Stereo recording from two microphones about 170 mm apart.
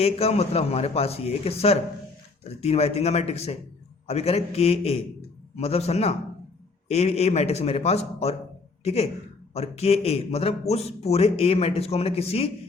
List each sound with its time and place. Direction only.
0.0 s a man's voice: 35° left (ahead or behind)